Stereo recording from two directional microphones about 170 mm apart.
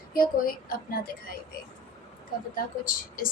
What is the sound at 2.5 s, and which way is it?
Speech, 55° left (ahead or behind).